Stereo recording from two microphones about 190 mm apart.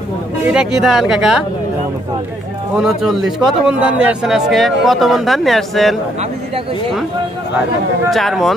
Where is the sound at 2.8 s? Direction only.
Centre (ahead or behind).